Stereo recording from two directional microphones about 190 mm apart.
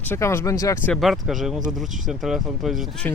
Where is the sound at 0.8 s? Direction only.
Centre (ahead or behind).